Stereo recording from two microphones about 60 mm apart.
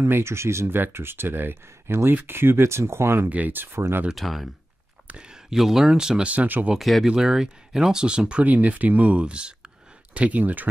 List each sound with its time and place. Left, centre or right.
0.0 s speech: right
0.7 s speech: right
3.3 s speech: right
4.1 s speech: centre
6.2 s speech: right
6.8 s speech: centre
7.1 s speech: centre; by 10.7 s right